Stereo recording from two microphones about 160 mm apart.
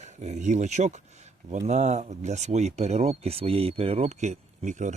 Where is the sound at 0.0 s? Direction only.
45° right (ahead or behind).